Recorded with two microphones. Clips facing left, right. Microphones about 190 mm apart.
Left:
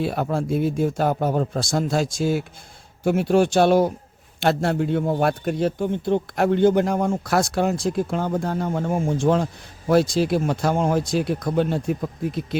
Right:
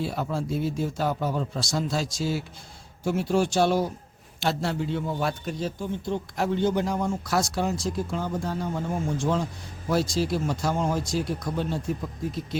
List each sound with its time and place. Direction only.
0.0 s a man's voice: 60° left (ahead or behind)